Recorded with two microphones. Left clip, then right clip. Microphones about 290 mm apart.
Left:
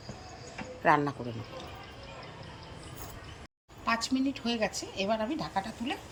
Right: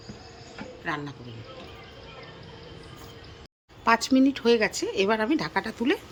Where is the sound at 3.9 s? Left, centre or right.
Centre.